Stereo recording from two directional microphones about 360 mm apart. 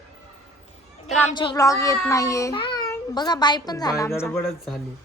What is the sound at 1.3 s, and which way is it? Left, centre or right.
A woman's voice, centre.